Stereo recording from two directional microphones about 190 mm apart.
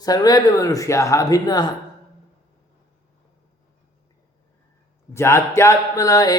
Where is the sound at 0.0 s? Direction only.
20° left (ahead or behind).